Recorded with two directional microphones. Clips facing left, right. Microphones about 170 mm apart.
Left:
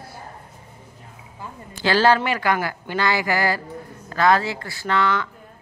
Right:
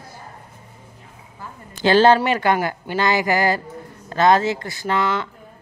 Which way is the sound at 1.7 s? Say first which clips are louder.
Right 4 dB; 20° right (ahead or behind).